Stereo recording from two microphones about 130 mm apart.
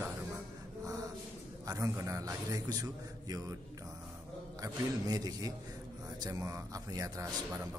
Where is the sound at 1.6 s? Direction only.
25° right (ahead or behind).